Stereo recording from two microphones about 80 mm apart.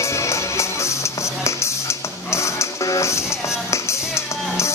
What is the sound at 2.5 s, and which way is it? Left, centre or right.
Music, left.